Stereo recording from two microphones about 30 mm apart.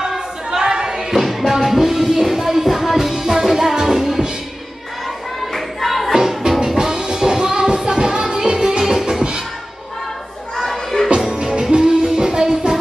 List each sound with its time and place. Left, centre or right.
0.5 s a sound: right
0.9 s music: centre
5.5 s a sound: centre
6.1 s music: centre
10.5 s children playing: centre
11.1 s music: right